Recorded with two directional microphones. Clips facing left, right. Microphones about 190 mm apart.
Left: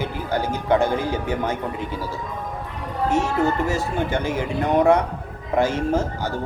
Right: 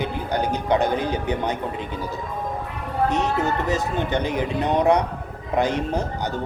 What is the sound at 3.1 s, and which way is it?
Speech, 20° right (ahead or behind).